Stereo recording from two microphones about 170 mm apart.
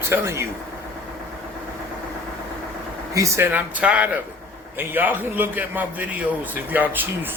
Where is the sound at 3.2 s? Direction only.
15° right (ahead or behind).